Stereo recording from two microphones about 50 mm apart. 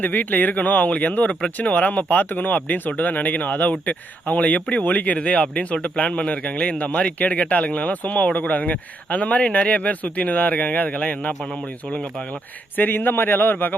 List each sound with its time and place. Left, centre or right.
0.0 s a man's voice: left